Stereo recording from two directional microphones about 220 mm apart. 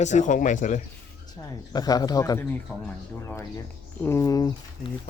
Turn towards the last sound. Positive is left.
turn(degrees=15)  # may be behind; listen again after turning